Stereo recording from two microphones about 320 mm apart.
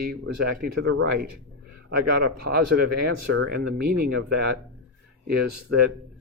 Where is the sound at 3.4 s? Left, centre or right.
Right.